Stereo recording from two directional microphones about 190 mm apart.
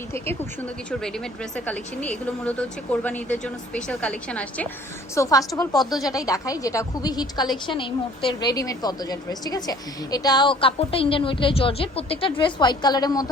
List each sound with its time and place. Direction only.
0.9 s a woman's voice: 5° left (ahead or behind)
5.1 s a woman's voice: 15° left (ahead or behind)